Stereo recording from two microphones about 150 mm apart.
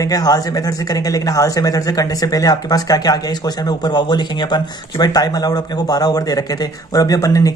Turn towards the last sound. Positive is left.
turn(degrees=20)  # may be behind; listen again after turning